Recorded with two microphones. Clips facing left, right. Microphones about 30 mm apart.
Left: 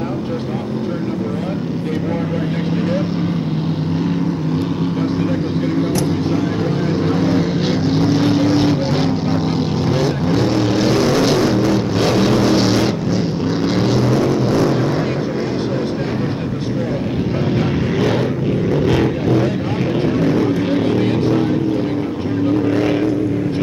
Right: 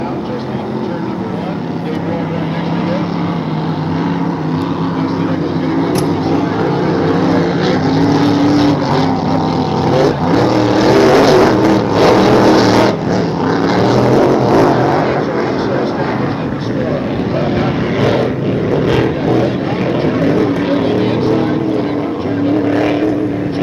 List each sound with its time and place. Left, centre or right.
6.9 s vehicle: centre
14.0 s music: right
14.7 s vehicle: centre
18.7 s vehicle: right
20.2 s music: right
22.7 s vehicle: right